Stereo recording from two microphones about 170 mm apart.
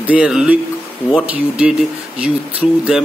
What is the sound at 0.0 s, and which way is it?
Speech, 10° right (ahead or behind).